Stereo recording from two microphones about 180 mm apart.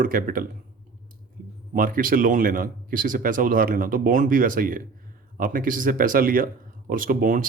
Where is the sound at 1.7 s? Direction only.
50° right (ahead or behind).